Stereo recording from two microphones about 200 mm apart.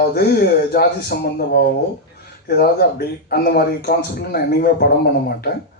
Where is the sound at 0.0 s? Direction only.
50° left (ahead or behind).